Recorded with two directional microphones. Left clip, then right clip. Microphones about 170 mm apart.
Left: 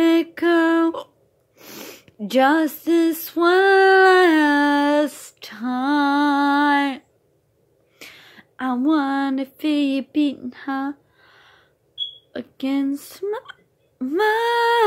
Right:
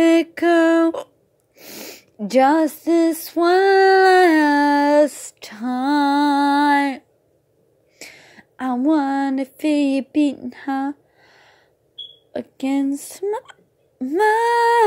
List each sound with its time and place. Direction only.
0.0 s music: 25° right (ahead or behind)
1.6 s sneeze: 10° right (ahead or behind)
2.2 s female singing: 15° right (ahead or behind)
8.0 s a sound: 15° right (ahead or behind)
12.3 s speech: 15° right (ahead or behind)